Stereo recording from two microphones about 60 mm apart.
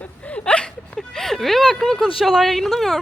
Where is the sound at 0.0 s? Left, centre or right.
Left.